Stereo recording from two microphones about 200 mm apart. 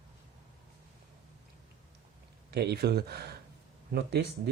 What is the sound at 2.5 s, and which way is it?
Speech, 55° right (ahead or behind).